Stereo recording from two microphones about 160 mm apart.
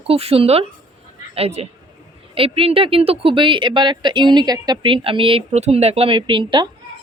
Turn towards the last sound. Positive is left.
turn(degrees=-30)  # may be behind; listen again after turning